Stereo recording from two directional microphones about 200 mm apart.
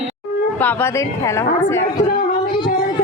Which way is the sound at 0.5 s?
10° left (ahead or behind).